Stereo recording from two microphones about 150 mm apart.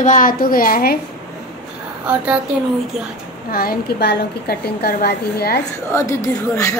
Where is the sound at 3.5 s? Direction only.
85° left.